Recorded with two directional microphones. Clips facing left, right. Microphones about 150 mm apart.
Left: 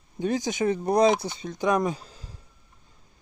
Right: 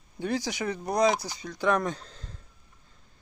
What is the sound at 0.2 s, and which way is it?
Speech, 20° left (ahead or behind).